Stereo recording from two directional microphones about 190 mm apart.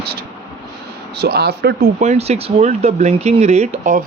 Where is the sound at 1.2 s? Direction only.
55° right (ahead or behind).